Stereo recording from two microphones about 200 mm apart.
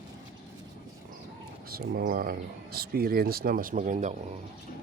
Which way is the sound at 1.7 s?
50° right (ahead or behind).